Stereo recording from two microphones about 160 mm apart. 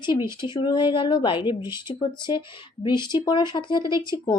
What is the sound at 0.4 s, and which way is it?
A woman's voice, 30° left (ahead or behind).